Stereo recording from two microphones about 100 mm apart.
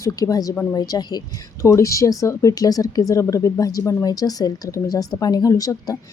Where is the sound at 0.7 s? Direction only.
40° left (ahead or behind).